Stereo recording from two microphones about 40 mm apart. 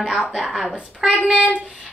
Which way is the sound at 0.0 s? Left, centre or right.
Centre.